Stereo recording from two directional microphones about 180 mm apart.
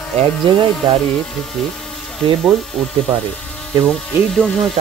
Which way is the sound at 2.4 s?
Centre (ahead or behind).